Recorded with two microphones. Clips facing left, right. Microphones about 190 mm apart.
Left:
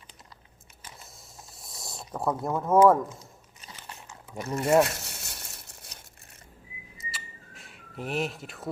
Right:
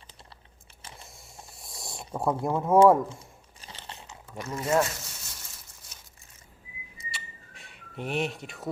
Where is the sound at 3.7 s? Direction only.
30° right (ahead or behind).